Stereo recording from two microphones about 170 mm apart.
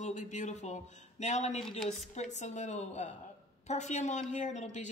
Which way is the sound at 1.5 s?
5° left (ahead or behind).